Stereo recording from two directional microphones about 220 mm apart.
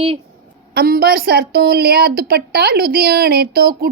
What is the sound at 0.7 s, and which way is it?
A woman's voice, 45° right (ahead or behind).